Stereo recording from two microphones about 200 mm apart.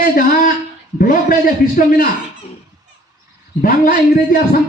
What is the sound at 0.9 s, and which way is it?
Speech, 45° left (ahead or behind).